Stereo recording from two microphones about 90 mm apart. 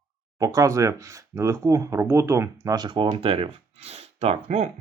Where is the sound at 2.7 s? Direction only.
55° right (ahead or behind); by 3.5 s 80° right.